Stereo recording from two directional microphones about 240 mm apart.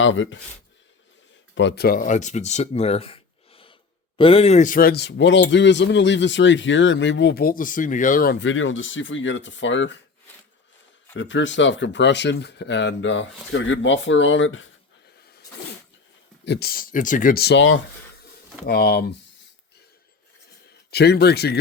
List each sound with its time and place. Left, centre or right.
0.0 s speech: left
1.5 s speech: left
11.1 s speech: left
16.5 s speech: left
20.9 s speech: left